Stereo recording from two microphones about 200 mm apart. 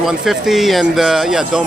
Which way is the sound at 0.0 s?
Centre (ahead or behind).